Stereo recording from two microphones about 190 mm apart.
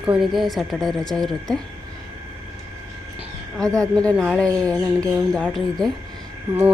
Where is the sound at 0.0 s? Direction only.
5° right (ahead or behind).